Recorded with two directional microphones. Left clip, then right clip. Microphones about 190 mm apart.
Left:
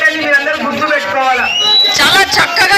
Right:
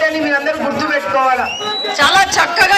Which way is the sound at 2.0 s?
35° right (ahead or behind).